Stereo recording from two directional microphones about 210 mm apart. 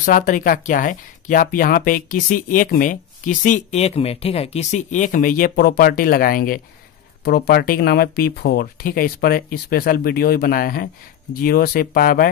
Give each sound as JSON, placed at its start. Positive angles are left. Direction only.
{"t": 0.0, "sound": "speech", "side_deg": 40}